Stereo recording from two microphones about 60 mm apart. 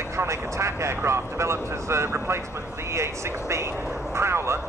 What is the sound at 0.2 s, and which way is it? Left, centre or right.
Speech, right.